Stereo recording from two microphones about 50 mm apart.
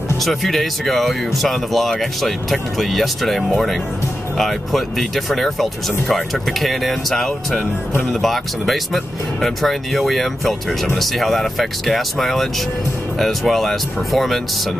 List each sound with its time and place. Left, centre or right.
0.2 s speech: centre